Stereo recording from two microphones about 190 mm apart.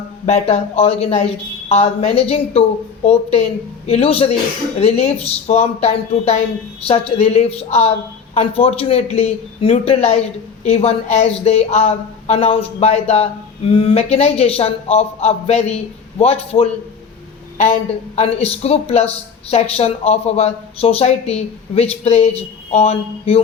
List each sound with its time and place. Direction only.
0.3 s speech: 35° left (ahead or behind)
18.2 s speech: 35° left (ahead or behind)